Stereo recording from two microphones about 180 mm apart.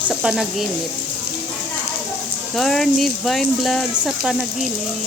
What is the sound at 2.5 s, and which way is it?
Speech, centre (ahead or behind).